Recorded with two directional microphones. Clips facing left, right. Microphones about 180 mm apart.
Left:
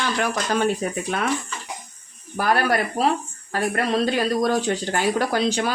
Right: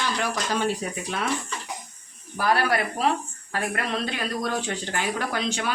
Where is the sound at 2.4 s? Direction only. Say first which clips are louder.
Left 2 dB; 45° left (ahead or behind).